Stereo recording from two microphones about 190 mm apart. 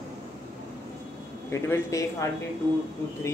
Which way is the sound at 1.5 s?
15° left (ahead or behind).